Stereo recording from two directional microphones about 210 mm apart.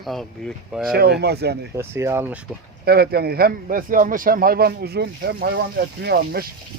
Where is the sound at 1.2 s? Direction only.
50° right (ahead or behind).